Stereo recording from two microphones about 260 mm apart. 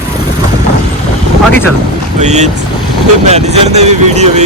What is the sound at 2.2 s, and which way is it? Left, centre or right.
Speech, right.